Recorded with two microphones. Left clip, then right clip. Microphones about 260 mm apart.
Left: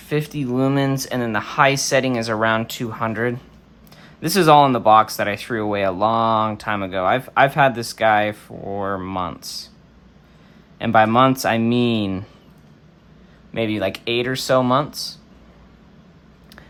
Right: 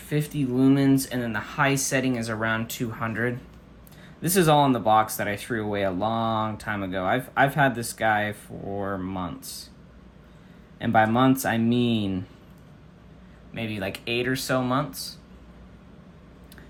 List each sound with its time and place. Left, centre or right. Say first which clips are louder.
0.1 s speech: left 5 dB; centre
10.8 s speech: left 6 dB; centre
13.5 s speech: left 9 dB; left